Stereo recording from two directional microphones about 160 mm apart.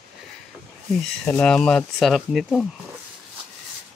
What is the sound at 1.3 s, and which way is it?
Speech, 5° left (ahead or behind).